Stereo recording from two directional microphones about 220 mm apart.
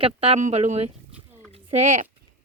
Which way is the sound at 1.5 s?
30° right (ahead or behind).